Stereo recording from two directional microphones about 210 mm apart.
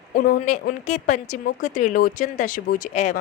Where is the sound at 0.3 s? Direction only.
40° left (ahead or behind).